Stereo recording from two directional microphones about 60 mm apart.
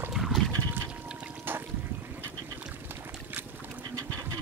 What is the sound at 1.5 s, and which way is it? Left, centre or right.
Boat, right.